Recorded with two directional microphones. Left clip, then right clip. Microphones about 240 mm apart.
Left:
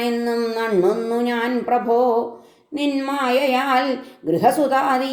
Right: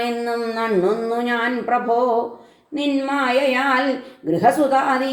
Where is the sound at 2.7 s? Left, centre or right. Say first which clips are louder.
Right 1 dB; left.